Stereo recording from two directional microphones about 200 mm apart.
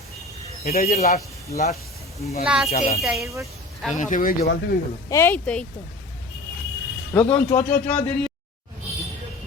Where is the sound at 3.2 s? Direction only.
15° right (ahead or behind).